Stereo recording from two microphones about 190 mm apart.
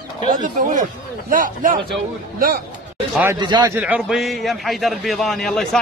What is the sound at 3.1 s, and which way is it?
Speech, 10° right (ahead or behind).